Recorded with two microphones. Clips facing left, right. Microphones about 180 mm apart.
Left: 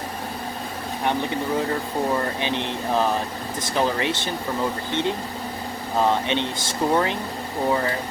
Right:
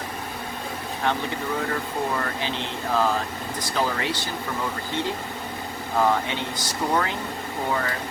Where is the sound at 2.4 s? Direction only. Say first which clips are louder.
Left 3 dB; 20° left (ahead or behind).